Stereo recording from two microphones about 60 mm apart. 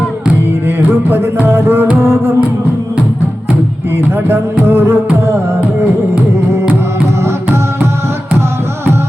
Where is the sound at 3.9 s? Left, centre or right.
Right.